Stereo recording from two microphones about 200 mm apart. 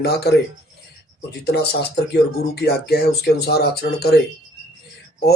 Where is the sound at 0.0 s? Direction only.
55° left (ahead or behind).